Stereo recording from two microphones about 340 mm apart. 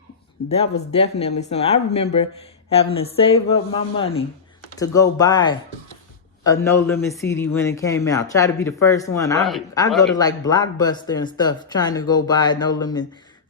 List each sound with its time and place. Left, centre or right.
0.4 s a man's voice: centre
10.0 s a man's voice: centre